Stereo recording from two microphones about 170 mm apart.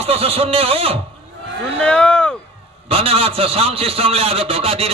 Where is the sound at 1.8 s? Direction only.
5° left (ahead or behind).